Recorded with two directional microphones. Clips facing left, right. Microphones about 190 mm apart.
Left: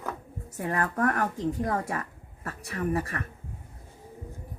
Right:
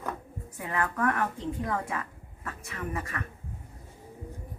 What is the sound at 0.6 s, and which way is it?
A woman's voice, 40° left (ahead or behind).